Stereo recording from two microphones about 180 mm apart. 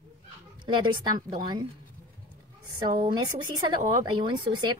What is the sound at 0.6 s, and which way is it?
Speech, 25° right (ahead or behind).